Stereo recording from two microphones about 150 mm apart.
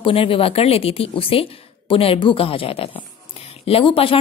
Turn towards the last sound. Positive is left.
turn(degrees=35)  # may be behind; listen again after turning